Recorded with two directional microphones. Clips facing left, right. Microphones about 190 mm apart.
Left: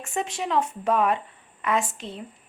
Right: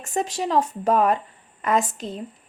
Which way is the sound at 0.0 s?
40° right (ahead or behind).